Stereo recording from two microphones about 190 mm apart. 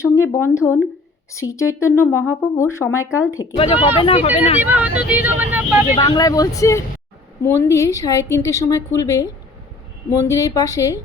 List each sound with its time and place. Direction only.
0.0 s a woman's voice: 15° left (ahead or behind)
3.6 s speech: 30° left (ahead or behind)
4.6 s speech: 10° right (ahead or behind)
6.0 s a woman's voice: 20° left (ahead or behind)